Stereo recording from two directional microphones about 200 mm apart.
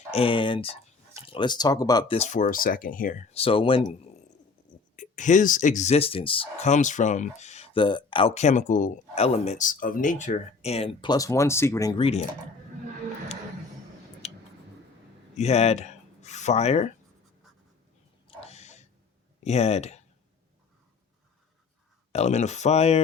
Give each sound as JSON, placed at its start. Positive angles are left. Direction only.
{"t": 0.1, "sound": "speech", "side_deg": 25}
{"t": 2.1, "sound": "speech", "side_deg": 35}
{"t": 14.2, "sound": "a sound", "side_deg": 35}
{"t": 15.4, "sound": "speech", "side_deg": 30}
{"t": 18.3, "sound": "a sound", "side_deg": 30}
{"t": 19.5, "sound": "speech", "side_deg": 30}
{"t": 22.1, "sound": "speech", "side_deg": 35}